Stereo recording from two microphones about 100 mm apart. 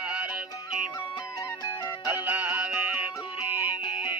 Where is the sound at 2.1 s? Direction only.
20° right (ahead or behind).